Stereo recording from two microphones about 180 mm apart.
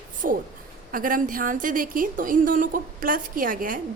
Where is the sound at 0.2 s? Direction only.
50° right (ahead or behind).